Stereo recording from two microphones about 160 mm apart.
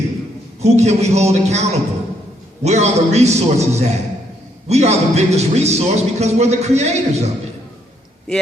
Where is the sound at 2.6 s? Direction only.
45° right (ahead or behind).